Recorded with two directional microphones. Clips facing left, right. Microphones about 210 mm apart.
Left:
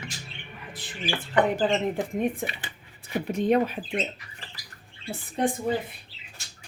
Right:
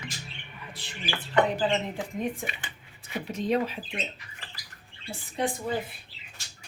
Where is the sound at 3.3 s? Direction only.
55° left (ahead or behind).